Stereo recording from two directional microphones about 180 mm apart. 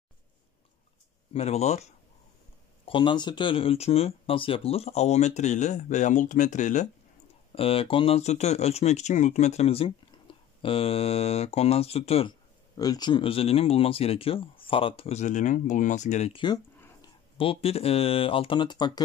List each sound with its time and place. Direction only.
1.3 s speech: 35° left (ahead or behind)
7.5 s speech: 30° left (ahead or behind)
12.7 s speech: 20° left (ahead or behind)